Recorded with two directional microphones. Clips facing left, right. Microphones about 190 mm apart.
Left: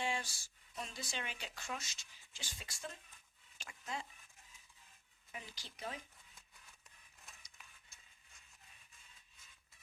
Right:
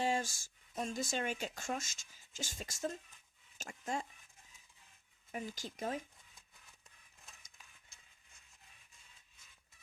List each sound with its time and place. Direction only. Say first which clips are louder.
0.0 s speech: right 6 dB; 45° right (ahead or behind)
5.3 s speech: right 10 dB; 45° right (ahead or behind)